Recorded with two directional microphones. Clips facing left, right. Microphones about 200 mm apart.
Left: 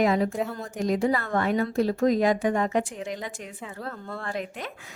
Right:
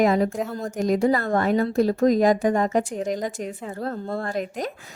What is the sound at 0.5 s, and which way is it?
A woman's voice, 40° right (ahead or behind).